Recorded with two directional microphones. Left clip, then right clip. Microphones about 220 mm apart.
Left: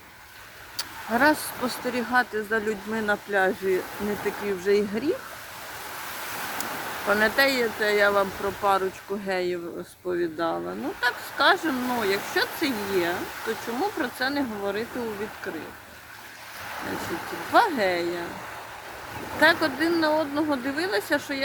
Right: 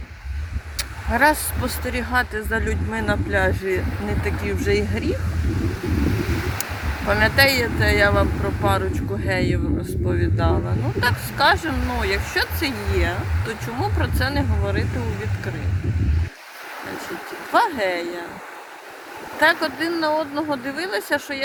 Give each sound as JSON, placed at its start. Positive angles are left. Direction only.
{"t": 0.8, "sound": "speech", "side_deg": -10}
{"t": 7.1, "sound": "speech", "side_deg": -15}
{"t": 17.5, "sound": "speech", "side_deg": -15}
{"t": 19.4, "sound": "speech", "side_deg": -15}